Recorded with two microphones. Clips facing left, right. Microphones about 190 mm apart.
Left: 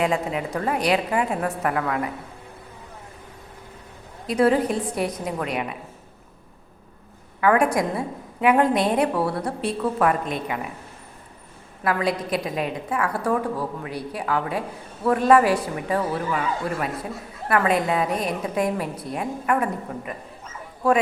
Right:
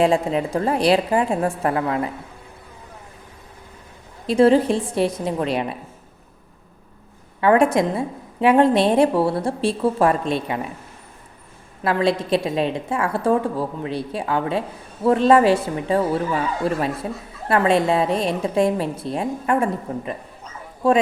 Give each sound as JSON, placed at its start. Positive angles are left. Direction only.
{"t": 0.0, "sound": "a woman's voice", "side_deg": -30}
{"t": 4.3, "sound": "a woman's voice", "side_deg": -30}
{"t": 7.4, "sound": "a woman's voice", "side_deg": -25}
{"t": 11.8, "sound": "a woman's voice", "side_deg": -25}